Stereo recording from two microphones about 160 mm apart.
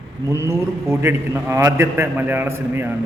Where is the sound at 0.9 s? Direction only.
15° right (ahead or behind).